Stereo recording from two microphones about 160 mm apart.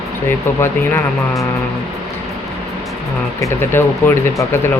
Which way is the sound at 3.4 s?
15° left (ahead or behind).